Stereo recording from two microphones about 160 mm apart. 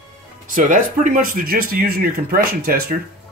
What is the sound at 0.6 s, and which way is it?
Speech, 55° right (ahead or behind).